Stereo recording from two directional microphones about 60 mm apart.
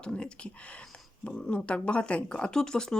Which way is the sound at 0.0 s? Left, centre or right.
Centre.